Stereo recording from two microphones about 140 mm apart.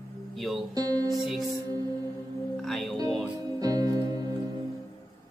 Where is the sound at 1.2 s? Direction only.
Centre (ahead or behind).